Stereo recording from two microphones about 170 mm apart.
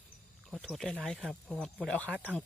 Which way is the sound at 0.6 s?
Centre (ahead or behind).